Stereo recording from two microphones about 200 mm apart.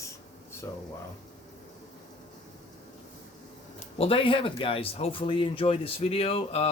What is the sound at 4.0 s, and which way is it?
Speech, 30° left (ahead or behind).